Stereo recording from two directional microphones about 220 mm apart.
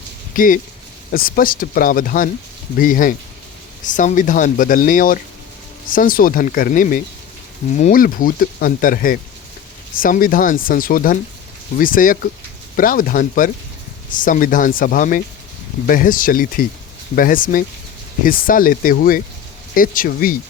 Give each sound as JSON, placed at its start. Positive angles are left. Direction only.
{"t": 0.3, "sound": "speech", "side_deg": 40}